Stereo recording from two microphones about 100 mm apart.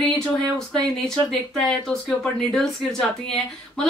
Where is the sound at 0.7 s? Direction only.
5° left (ahead or behind).